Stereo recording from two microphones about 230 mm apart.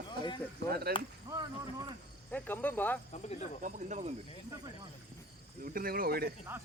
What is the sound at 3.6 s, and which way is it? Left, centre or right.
Speech, right.